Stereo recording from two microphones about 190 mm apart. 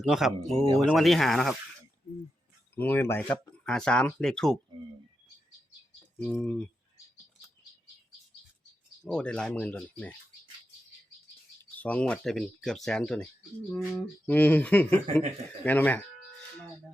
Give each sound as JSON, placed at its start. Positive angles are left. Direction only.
{"t": 0.0, "sound": "speech", "side_deg": 0}
{"t": 2.7, "sound": "speech", "side_deg": 10}
{"t": 6.3, "sound": "speech", "side_deg": 5}
{"t": 9.0, "sound": "speech", "side_deg": 5}
{"t": 11.8, "sound": "speech", "side_deg": 5}